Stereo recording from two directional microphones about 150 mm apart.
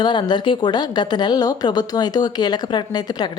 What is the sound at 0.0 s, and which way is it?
Speech, 30° left (ahead or behind).